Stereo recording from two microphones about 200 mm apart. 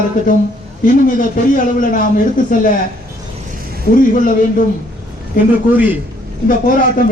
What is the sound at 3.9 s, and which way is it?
Speech, 45° left (ahead or behind).